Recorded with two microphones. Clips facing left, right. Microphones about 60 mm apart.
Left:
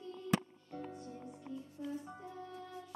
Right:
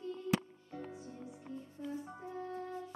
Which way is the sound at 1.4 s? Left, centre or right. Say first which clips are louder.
Left 1 dB; right.